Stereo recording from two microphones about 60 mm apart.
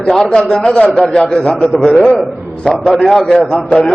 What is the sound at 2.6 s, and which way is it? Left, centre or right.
A man's voice, centre.